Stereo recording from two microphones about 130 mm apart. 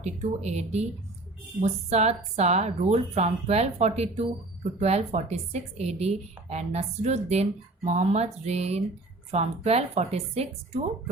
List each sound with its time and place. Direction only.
0.0 s speech: 60° right (ahead or behind)